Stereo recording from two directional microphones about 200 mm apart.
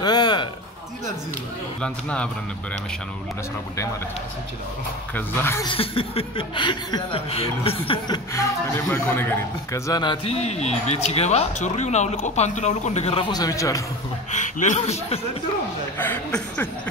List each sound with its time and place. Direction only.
0.0 s a sound: 20° left (ahead or behind)
1.8 s speech: 5° left (ahead or behind)
5.1 s speech: 10° left (ahead or behind)
5.8 s speech: 25° left (ahead or behind)
14.3 s speech: 40° left (ahead or behind)
16.0 s speech: 5° left (ahead or behind)